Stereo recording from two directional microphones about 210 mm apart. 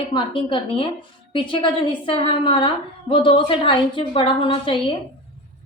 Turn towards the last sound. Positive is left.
turn(degrees=25)  # may be behind; listen again after turning